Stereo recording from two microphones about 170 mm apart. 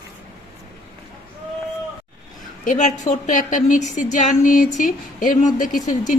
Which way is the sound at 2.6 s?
45° left (ahead or behind).